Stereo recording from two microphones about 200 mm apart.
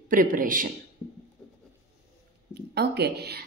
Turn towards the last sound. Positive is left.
turn(degrees=-55)  # may be behind; listen again after turning